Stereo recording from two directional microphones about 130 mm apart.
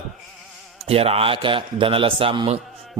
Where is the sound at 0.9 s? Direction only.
50° right (ahead or behind).